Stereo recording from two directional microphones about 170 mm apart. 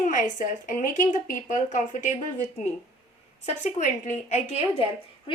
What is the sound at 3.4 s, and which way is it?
A woman's voice, 45° left (ahead or behind).